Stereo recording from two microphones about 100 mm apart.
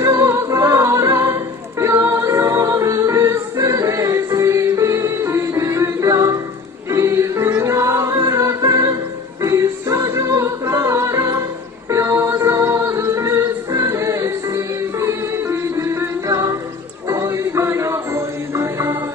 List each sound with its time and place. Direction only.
0.0 s music: 35° right (ahead or behind)